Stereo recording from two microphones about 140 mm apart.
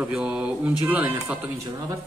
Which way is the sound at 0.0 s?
5° right (ahead or behind).